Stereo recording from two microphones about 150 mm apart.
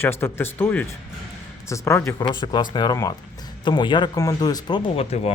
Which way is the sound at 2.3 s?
30° left (ahead or behind).